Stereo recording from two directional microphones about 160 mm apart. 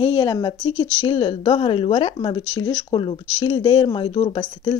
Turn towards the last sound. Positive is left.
turn(degrees=30)  # may be behind; listen again after turning